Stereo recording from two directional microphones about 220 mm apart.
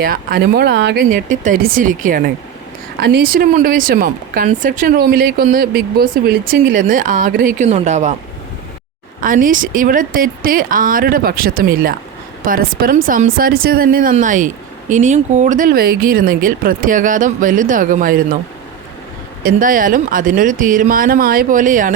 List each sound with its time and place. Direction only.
0.0 s speech: 40° right (ahead or behind)
9.2 s speech: 40° right (ahead or behind)
19.4 s speech: 40° right (ahead or behind)